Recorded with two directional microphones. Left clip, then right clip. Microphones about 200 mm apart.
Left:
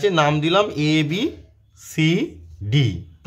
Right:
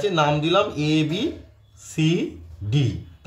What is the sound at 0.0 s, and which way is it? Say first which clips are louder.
A man's voice: left 3 dB; 25° left (ahead or behind).